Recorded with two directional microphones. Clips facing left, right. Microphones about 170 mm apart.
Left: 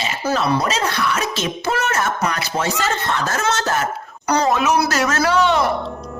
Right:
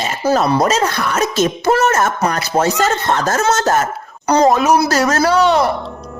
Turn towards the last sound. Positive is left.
turn(degrees=-40)  # may be behind; listen again after turning